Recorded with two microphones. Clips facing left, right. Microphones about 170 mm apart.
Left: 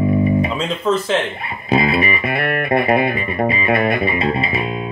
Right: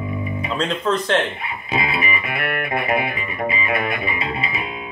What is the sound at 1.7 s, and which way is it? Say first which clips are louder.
Music: left 7 dB; 35° left (ahead or behind).